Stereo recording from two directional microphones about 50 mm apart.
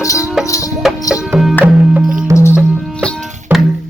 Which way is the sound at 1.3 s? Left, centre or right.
Centre.